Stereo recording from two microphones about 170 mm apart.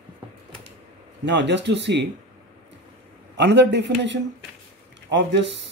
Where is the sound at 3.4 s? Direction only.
90° right.